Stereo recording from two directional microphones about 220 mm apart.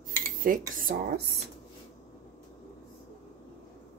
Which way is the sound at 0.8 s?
45° right (ahead or behind).